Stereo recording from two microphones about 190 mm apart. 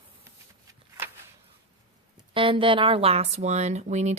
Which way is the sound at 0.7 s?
10° right (ahead or behind).